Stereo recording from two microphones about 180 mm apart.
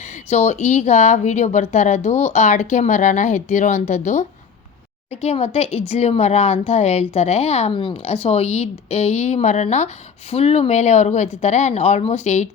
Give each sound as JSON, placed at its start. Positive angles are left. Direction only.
{"t": 0.3, "sound": "a woman's voice", "side_deg": 40}